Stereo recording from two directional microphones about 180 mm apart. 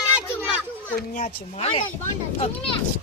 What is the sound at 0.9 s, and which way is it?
Speech, 50° left (ahead or behind).